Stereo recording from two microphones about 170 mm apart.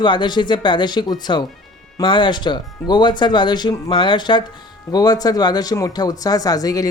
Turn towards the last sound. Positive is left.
turn(degrees=20)  # may be behind; listen again after turning